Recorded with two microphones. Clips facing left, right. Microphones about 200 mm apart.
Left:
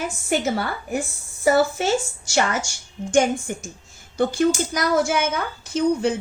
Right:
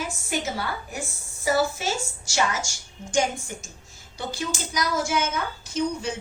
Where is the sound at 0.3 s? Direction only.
60° left (ahead or behind).